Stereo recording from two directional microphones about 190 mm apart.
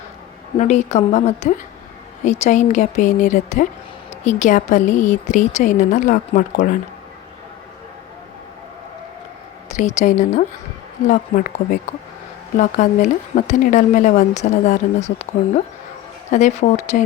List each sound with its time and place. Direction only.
0.5 s speech: 40° left (ahead or behind)
9.6 s speech: 40° left (ahead or behind)
12.5 s speech: 40° left (ahead or behind)